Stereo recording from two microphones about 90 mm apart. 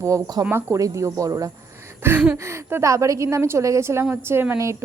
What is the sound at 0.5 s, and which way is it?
Speech, 35° right (ahead or behind).